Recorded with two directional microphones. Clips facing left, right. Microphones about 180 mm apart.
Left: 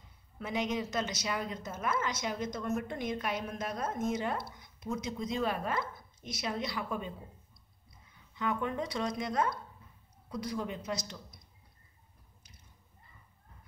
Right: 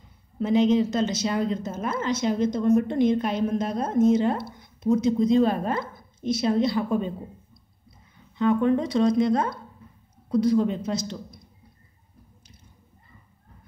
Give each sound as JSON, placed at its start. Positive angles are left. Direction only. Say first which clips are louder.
{"t": 0.4, "sound": "a woman's voice", "louder": "right 14 dB", "side_deg": -30}
{"t": 8.4, "sound": "a woman's voice", "louder": "right 12 dB", "side_deg": -30}